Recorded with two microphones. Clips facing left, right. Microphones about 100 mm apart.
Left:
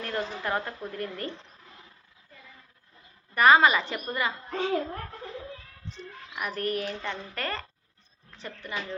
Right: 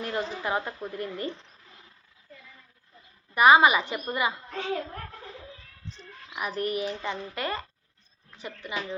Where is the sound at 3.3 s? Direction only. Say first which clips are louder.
Right 1 dB; 15° right (ahead or behind).